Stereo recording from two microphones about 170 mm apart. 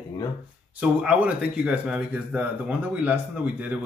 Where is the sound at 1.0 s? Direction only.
5° right (ahead or behind).